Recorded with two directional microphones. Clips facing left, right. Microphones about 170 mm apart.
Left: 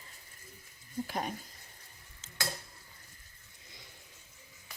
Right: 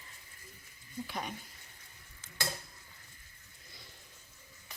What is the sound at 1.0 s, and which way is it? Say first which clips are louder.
Speech: left 4 dB; 40° left (ahead or behind).